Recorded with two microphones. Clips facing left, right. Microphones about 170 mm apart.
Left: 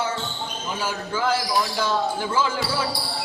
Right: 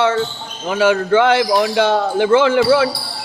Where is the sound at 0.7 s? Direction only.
75° right (ahead or behind).